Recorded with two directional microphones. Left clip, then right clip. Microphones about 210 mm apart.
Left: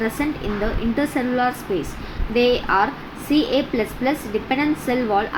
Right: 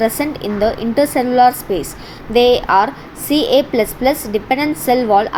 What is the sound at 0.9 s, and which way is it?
A woman's voice, 35° right (ahead or behind).